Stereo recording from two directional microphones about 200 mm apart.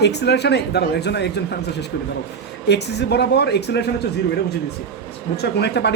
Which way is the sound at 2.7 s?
55° left (ahead or behind).